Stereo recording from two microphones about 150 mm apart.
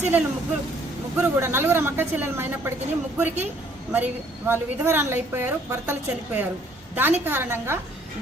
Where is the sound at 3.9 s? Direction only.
15° right (ahead or behind).